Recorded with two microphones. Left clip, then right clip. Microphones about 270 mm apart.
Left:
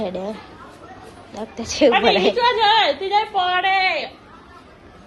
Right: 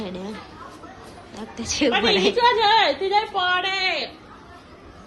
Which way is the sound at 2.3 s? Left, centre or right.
Left.